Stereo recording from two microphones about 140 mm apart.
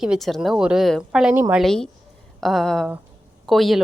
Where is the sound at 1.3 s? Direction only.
15° right (ahead or behind).